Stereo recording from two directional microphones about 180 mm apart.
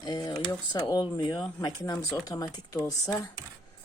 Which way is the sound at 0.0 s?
25° left (ahead or behind).